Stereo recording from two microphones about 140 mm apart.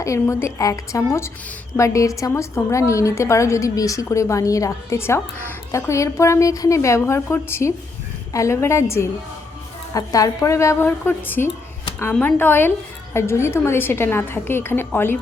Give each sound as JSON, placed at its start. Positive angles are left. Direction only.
{"t": 0.0, "sound": "a woman's voice", "side_deg": 20}